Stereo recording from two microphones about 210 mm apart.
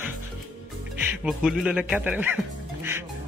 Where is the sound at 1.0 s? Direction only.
5° right (ahead or behind).